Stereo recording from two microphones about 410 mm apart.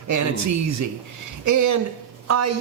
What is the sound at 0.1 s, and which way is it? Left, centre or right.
Speech, right.